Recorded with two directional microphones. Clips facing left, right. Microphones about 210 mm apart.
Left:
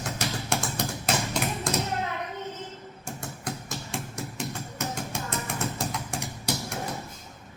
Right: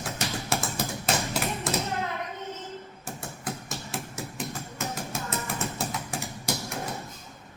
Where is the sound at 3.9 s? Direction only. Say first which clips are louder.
Left 1 dB; centre (ahead or behind).